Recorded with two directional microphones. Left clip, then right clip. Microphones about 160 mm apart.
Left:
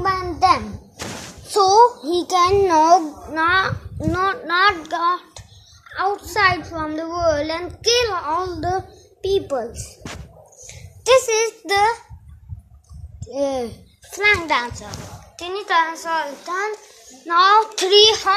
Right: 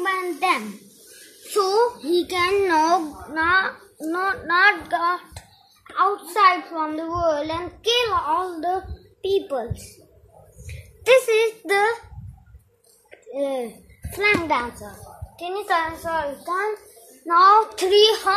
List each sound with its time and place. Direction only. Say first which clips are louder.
0.0 s a sound: left 5 dB; 5° left (ahead or behind)
2.4 s a child's voice: left 5 dB; centre (ahead or behind)
5.9 s a child's voice: right 1 dB; centre (ahead or behind)
9.2 s a child's voice: left 2 dB; 5° left (ahead or behind)
10.7 s a child's voice: left 1 dB; 10° right (ahead or behind)
13.3 s a child's voice: left 3 dB; 20° left (ahead or behind)
14.1 s a child's voice: left 3 dB; 5° right (ahead or behind)
15.3 s a child's voice: left 4 dB; 15° left (ahead or behind)
17.3 s a child's voice: even; 10° right (ahead or behind)
17.7 s a child's voice: left 3 dB; centre (ahead or behind)